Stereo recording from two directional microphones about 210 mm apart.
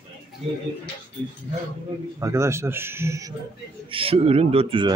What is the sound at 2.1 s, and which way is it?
Speech, 15° right (ahead or behind).